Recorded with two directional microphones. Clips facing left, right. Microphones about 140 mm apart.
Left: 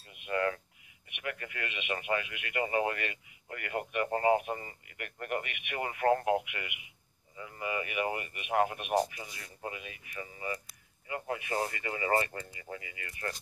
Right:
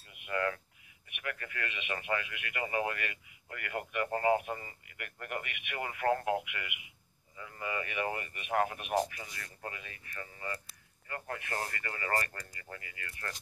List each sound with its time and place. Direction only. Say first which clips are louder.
0.1 s cutlery: left 2 dB; 25° left (ahead or behind)
1.0 s speech: left 2 dB; 20° left (ahead or behind)